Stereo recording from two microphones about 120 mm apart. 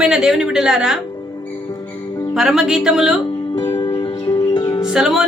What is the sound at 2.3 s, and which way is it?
Speech, centre (ahead or behind).